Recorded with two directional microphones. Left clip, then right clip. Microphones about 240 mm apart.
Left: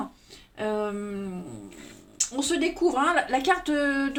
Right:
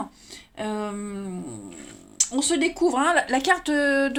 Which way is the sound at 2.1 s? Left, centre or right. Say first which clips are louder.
Right 3 dB; right.